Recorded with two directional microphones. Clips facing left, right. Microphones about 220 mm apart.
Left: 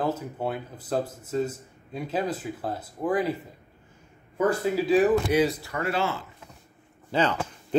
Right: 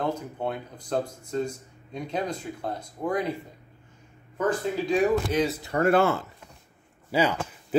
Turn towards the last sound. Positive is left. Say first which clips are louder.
# even
turn(degrees=-10)  # may be behind; listen again after turning